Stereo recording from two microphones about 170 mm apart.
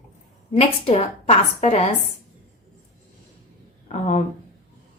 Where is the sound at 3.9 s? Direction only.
45° left (ahead or behind).